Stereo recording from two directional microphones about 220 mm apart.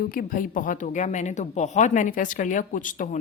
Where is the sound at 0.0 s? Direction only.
40° left (ahead or behind).